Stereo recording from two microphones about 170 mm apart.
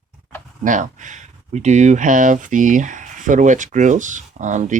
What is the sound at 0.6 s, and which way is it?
Speech, 45° right (ahead or behind).